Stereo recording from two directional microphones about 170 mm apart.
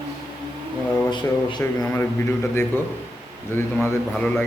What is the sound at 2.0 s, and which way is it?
A man's voice, 15° left (ahead or behind).